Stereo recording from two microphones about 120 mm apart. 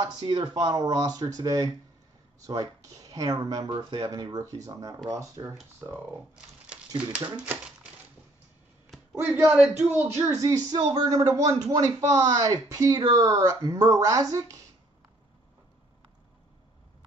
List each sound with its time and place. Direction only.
0.0 s speech: 40° right (ahead or behind)
3.6 s speech: 45° right (ahead or behind)
4.0 s speech: 30° right (ahead or behind)
9.1 s speech: 20° right (ahead or behind)
9.4 s a man's voice: 5° right (ahead or behind)
9.8 s speech: 20° right (ahead or behind)